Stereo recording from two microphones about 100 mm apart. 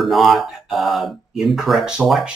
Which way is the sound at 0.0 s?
Centre (ahead or behind).